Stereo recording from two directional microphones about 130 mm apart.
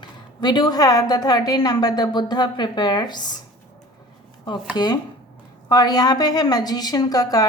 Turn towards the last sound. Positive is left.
turn(degrees=30)  # may be behind; listen again after turning